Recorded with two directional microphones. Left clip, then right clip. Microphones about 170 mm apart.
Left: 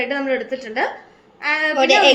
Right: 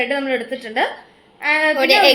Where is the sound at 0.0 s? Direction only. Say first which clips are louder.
Right 1 dB; 60° right (ahead or behind).